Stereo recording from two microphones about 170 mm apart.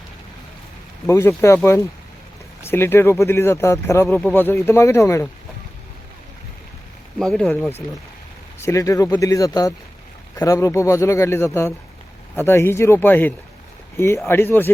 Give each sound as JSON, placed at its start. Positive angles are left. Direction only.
{"t": 1.0, "sound": "speech", "side_deg": 15}
{"t": 7.2, "sound": "speech", "side_deg": 5}